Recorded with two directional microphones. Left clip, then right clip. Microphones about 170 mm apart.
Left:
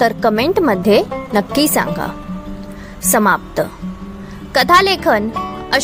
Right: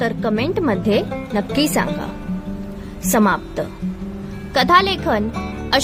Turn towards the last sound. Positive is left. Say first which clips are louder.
# left 2 dB
turn(degrees=30)  # may be behind; listen again after turning